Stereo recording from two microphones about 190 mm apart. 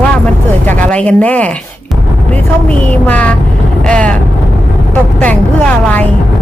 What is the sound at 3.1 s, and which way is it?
Speech, 5° left (ahead or behind).